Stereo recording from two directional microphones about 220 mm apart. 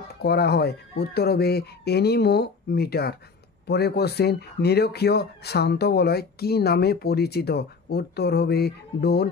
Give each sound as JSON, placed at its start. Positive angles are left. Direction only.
{"t": 0.2, "sound": "speech", "side_deg": 45}